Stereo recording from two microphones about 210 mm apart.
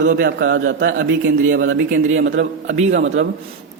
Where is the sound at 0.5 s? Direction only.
65° right (ahead or behind).